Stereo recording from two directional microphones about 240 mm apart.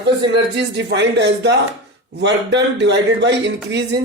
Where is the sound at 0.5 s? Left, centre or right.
Right.